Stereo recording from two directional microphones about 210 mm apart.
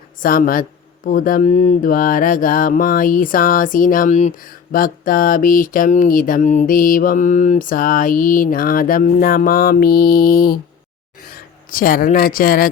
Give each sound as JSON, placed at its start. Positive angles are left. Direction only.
{"t": 0.2, "sound": "mantra", "side_deg": 40}
{"t": 11.3, "sound": "speech", "side_deg": 40}